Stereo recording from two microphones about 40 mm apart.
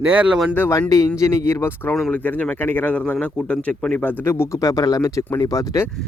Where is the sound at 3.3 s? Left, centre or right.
Left.